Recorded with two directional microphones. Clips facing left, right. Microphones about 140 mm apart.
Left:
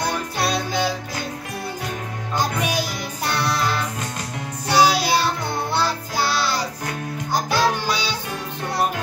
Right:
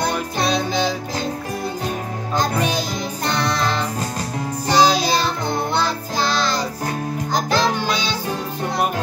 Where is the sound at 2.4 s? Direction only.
10° left (ahead or behind).